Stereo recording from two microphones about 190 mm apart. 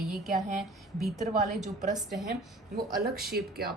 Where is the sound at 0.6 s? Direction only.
Centre (ahead or behind).